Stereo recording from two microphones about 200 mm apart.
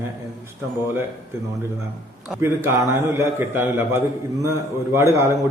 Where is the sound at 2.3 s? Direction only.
15° right (ahead or behind).